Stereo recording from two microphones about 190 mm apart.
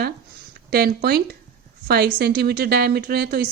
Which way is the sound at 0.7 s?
55° right (ahead or behind).